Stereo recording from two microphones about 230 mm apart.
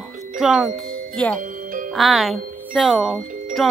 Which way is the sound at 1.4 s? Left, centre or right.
Right.